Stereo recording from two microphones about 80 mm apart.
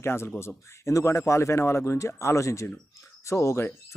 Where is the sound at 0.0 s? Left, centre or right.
Left.